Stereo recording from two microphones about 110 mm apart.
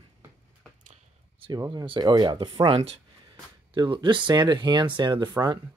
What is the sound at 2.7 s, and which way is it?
Speech, 65° right (ahead or behind).